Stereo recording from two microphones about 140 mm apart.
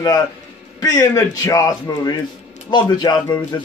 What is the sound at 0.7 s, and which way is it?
A man's voice, 25° left (ahead or behind).